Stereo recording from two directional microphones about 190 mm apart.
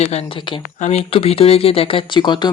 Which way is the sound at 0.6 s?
35° left (ahead or behind).